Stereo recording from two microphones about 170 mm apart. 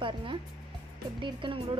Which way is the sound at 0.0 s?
30° right (ahead or behind).